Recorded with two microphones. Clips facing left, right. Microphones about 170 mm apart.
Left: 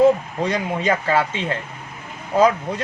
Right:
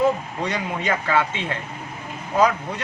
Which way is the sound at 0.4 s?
30° left (ahead or behind).